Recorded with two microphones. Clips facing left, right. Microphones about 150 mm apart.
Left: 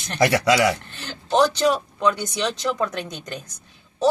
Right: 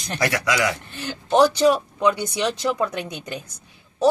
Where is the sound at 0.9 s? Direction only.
10° right (ahead or behind).